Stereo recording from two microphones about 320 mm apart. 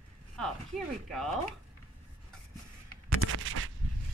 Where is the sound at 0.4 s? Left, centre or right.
Centre.